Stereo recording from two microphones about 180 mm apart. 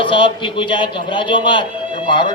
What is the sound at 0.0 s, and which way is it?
Speech, 30° left (ahead or behind).